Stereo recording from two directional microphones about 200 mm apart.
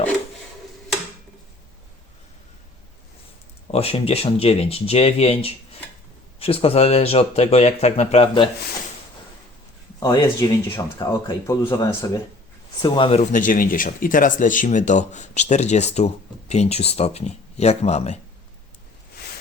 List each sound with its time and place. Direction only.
3.7 s speech: 30° left (ahead or behind)
10.0 s speech: 15° left (ahead or behind); by 18.2 s 30° left (ahead or behind)